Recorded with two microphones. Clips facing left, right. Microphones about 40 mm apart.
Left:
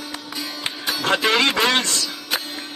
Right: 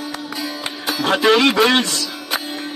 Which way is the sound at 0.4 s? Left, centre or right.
Centre.